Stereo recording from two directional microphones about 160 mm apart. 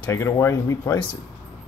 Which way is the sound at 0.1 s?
20° left (ahead or behind).